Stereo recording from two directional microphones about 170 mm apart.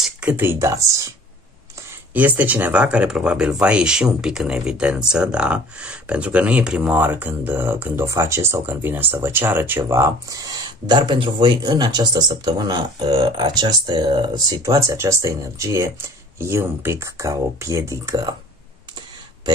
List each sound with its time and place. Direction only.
0.0 s speech: 5° right (ahead or behind)
2.1 s speech: 10° right (ahead or behind)